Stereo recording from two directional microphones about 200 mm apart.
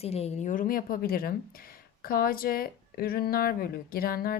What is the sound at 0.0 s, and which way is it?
Speech, 30° left (ahead or behind).